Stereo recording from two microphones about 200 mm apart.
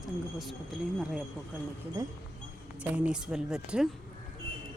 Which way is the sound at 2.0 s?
15° right (ahead or behind).